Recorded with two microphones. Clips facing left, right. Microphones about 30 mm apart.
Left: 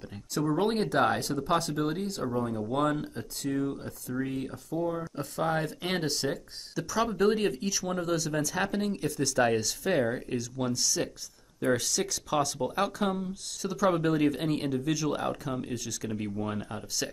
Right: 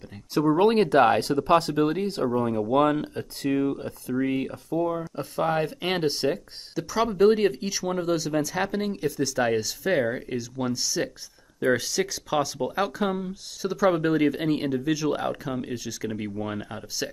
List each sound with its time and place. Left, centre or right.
0.3 s speech: right
1.6 s speech: right
3.7 s speech: right
5.2 s speech: centre